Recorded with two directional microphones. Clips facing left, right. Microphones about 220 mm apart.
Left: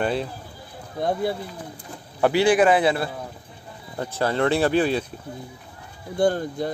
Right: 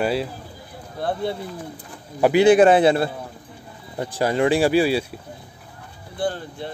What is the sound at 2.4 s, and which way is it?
Speech, 25° right (ahead or behind).